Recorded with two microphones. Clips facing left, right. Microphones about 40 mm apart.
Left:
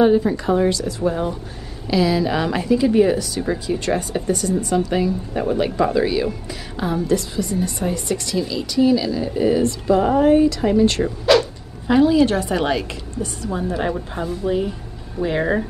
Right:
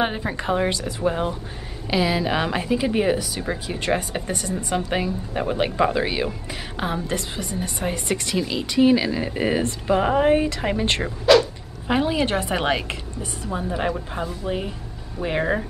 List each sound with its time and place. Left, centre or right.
0.0 s a woman's voice: right
11.3 s dog: centre
11.9 s speech: right
13.5 s speech: centre